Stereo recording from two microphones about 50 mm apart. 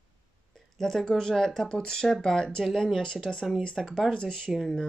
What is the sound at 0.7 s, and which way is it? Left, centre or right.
Speech, centre.